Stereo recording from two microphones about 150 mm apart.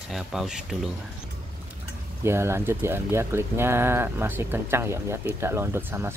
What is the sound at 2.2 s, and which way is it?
Speech, 15° right (ahead or behind).